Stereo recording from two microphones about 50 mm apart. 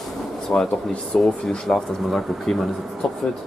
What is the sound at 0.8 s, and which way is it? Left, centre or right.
Speech, centre.